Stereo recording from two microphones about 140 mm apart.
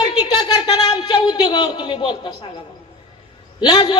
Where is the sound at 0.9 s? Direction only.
30° left (ahead or behind).